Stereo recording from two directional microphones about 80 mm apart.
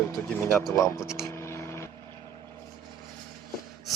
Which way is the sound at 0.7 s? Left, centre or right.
Left.